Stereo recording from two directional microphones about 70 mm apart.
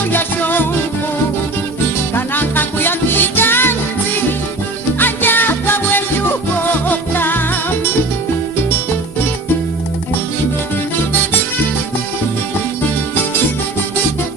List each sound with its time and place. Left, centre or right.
0.0 s music: left
2.1 s music: left
4.9 s music: left